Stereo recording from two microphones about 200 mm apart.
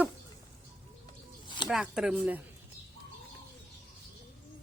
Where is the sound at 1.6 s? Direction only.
5° right (ahead or behind).